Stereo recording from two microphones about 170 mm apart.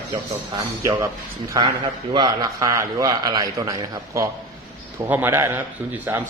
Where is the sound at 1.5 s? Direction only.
25° right (ahead or behind).